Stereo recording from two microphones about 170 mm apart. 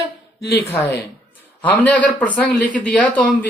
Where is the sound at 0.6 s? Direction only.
10° left (ahead or behind).